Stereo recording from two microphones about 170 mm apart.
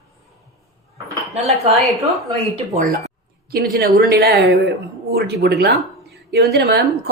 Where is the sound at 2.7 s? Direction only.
50° right (ahead or behind).